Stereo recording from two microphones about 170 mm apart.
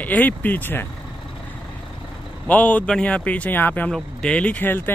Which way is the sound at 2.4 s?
10° left (ahead or behind).